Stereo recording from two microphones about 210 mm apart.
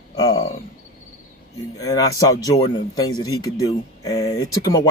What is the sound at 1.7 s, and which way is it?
Speech, 15° left (ahead or behind).